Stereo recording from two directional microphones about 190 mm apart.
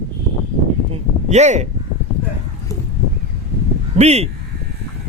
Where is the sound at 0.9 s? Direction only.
35° right (ahead or behind).